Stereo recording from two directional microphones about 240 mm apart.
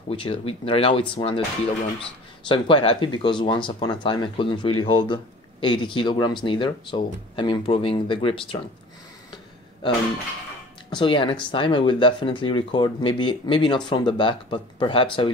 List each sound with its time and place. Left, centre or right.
0.1 s speech: left
10.9 s speech: centre